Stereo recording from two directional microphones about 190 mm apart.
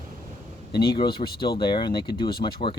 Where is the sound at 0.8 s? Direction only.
25° left (ahead or behind).